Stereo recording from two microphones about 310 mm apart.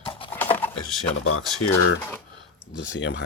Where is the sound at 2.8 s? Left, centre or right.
Left.